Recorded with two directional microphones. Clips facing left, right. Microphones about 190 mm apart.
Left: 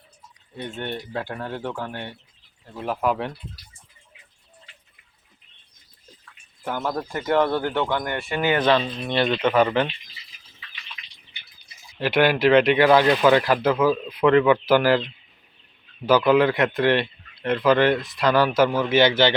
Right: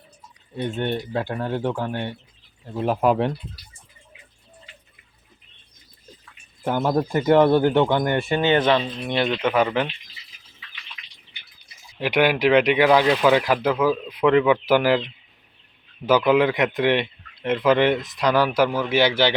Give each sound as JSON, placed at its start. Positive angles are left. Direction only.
{"t": 0.5, "sound": "speech", "side_deg": -20}
{"t": 6.7, "sound": "speech", "side_deg": -25}
{"t": 8.6, "sound": "speech", "side_deg": -15}
{"t": 11.9, "sound": "speech", "side_deg": -15}